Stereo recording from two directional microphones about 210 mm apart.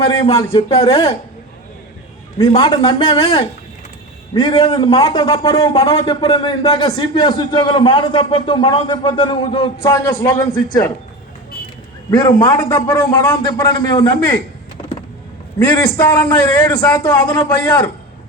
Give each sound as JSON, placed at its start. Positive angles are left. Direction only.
{"t": 0.0, "sound": "speech", "side_deg": 30}
{"t": 2.6, "sound": "a man's voice", "side_deg": 20}
{"t": 5.7, "sound": "speech", "side_deg": 30}
{"t": 12.1, "sound": "a man's voice", "side_deg": 20}
{"t": 15.5, "sound": "a man's voice", "side_deg": 15}